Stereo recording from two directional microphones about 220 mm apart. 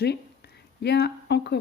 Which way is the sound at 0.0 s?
50° left (ahead or behind).